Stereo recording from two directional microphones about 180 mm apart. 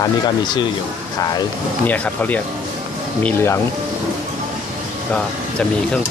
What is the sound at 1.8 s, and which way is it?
Speech, 10° left (ahead or behind).